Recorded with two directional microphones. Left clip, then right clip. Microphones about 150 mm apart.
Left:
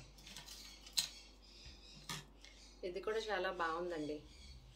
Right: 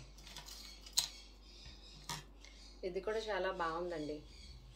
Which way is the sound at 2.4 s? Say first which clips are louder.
Right 3 dB; 15° left (ahead or behind).